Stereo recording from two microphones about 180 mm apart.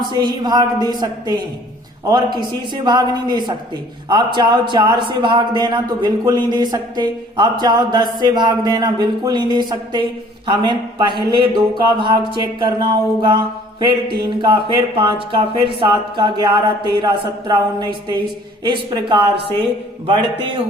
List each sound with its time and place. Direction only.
0.1 s a man's voice: 25° right (ahead or behind)